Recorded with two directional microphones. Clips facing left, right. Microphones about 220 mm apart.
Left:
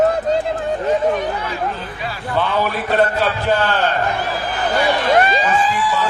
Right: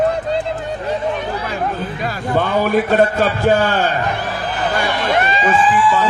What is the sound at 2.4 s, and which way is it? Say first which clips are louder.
A man's voice: right 4 dB; 50° right (ahead or behind).